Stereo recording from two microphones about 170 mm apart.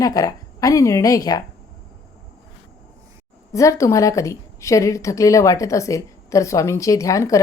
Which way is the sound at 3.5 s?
20° left (ahead or behind).